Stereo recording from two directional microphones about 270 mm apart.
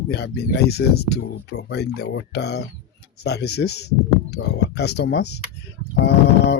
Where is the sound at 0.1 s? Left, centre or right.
Left.